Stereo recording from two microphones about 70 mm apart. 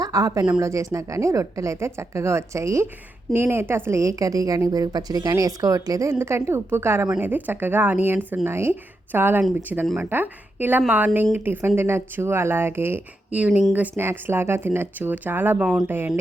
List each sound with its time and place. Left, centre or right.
0.0 s speech: right
0.6 s a woman's voice: right
3.3 s a woman's voice: right
6.1 s speech: right
13.3 s speech: centre
13.9 s speech: right
15.5 s speech: centre
15.9 s speech: right